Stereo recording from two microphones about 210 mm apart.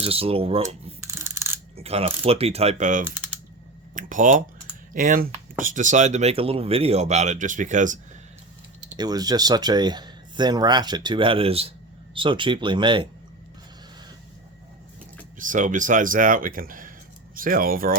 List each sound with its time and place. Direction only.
0.0 s speech: 25° right (ahead or behind)
1.0 s a sound: 10° right (ahead or behind)
1.7 s speech: 30° right (ahead or behind)
3.9 s a sound: 40° right (ahead or behind)
4.9 s speech: 40° right (ahead or behind)
9.0 s speech: 20° right (ahead or behind)
15.4 s speech: 40° right (ahead or behind)